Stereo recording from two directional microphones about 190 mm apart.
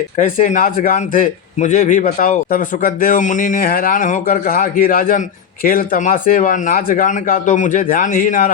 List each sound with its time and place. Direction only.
0.2 s a man's voice: 40° left (ahead or behind)